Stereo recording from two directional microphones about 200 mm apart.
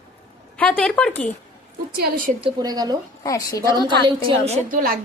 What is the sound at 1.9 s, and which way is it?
Speech, 45° right (ahead or behind).